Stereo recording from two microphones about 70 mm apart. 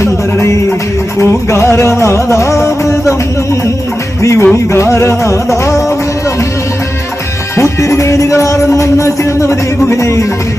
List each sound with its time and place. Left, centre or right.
0.0 s music: left
7.5 s music: left